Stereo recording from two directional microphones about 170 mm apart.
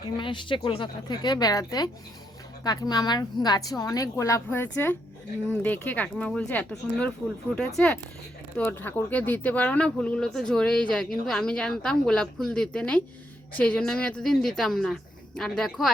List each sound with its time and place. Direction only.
0.2 s a woman's voice: 30° left (ahead or behind); by 7.1 s 10° left (ahead or behind)
8.5 s speech: 10° left (ahead or behind)